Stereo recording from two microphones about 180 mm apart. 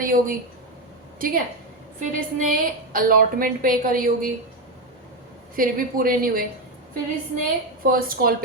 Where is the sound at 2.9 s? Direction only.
50° right (ahead or behind).